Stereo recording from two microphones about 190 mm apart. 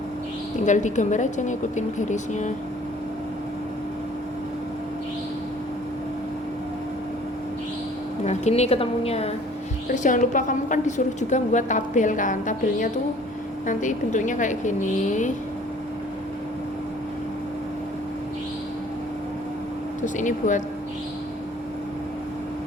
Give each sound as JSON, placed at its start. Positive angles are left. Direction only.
{"t": 0.6, "sound": "a woman's voice", "side_deg": 40}
{"t": 8.2, "sound": "a woman's voice", "side_deg": 35}
{"t": 20.1, "sound": "a woman's voice", "side_deg": 40}